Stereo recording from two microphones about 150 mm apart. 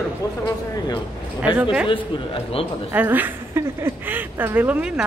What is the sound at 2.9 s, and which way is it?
A woman's voice, 10° right (ahead or behind).